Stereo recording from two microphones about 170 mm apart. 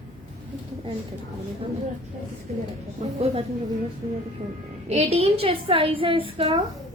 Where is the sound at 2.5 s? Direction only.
40° right (ahead or behind).